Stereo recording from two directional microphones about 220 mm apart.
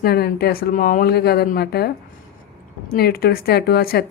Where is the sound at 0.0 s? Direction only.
45° left (ahead or behind).